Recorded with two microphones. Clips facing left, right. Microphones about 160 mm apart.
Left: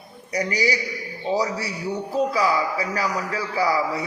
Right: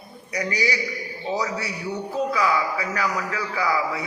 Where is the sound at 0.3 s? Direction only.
35° left (ahead or behind).